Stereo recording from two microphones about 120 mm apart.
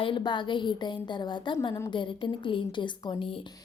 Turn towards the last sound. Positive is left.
turn(degrees=45)  # may be behind; listen again after turning